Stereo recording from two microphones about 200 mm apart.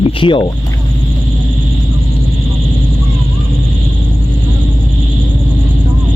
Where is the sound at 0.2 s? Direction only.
25° left (ahead or behind).